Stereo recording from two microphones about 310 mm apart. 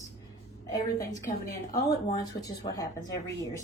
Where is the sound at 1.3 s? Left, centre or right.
Left.